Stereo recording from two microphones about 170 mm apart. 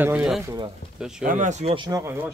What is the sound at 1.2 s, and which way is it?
Speech, 50° right (ahead or behind).